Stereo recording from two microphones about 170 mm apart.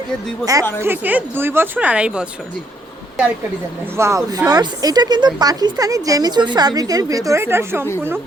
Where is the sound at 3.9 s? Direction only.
15° right (ahead or behind).